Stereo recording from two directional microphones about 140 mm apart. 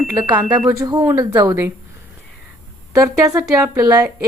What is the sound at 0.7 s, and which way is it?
Speech, 30° right (ahead or behind).